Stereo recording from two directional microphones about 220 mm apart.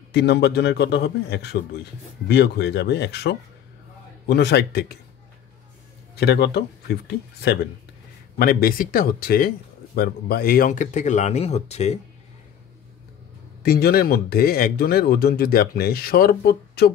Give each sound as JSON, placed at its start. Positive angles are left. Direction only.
{"t": 0.1, "sound": "speech", "side_deg": 50}
{"t": 6.1, "sound": "speech", "side_deg": 45}
{"t": 13.6, "sound": "speech", "side_deg": 45}